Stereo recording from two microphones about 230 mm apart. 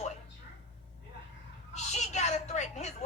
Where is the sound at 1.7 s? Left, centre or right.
Left.